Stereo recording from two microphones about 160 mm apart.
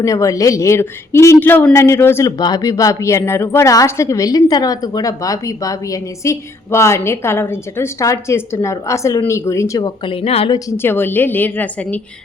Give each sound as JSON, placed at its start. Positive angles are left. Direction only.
{"t": 0.0, "sound": "a woman's voice", "side_deg": 20}
{"t": 10.5, "sound": "a woman's voice", "side_deg": 15}